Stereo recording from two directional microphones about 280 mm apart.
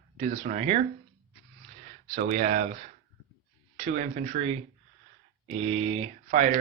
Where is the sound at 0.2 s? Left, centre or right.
Right.